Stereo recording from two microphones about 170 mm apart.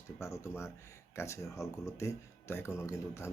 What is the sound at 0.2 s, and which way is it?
Speech, 15° left (ahead or behind).